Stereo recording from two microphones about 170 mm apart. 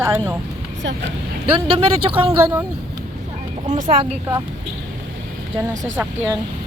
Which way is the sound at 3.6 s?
50° right (ahead or behind).